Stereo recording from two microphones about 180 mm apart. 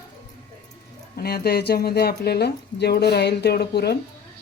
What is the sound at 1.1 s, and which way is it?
Speech, 60° left (ahead or behind).